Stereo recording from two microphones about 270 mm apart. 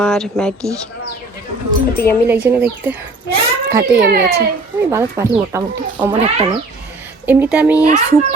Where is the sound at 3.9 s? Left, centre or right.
Right.